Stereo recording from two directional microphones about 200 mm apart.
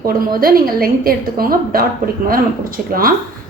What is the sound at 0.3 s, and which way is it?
A woman's voice, 45° right (ahead or behind).